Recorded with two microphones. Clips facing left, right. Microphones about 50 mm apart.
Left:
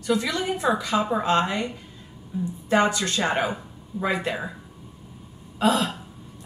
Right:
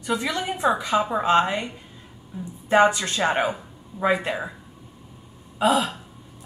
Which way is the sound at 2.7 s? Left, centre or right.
Centre.